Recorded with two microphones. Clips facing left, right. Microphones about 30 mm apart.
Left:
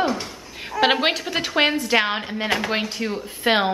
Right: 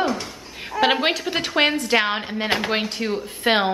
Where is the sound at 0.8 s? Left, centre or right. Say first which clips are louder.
Even; centre.